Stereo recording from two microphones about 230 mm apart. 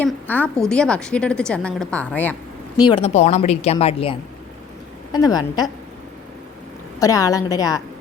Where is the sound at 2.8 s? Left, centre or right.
Left.